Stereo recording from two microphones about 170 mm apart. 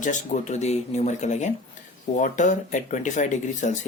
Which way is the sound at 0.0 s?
45° left (ahead or behind).